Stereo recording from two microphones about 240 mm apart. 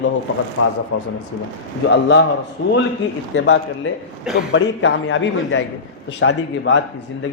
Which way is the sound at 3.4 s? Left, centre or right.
Left.